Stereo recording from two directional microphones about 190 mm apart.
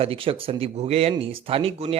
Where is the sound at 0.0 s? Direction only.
30° right (ahead or behind).